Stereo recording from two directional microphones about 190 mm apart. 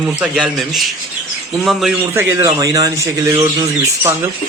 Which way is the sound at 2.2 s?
15° right (ahead or behind).